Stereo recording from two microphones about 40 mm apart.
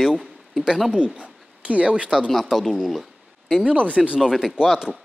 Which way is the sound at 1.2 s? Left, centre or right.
Right.